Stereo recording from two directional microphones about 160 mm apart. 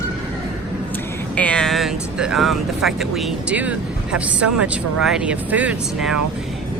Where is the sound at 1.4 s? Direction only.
5° left (ahead or behind).